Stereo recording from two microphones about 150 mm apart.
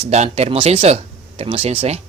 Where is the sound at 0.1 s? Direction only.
45° right (ahead or behind).